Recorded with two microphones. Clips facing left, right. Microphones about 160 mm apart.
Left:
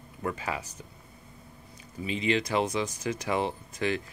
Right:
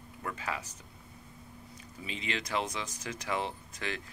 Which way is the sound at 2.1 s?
5° left (ahead or behind).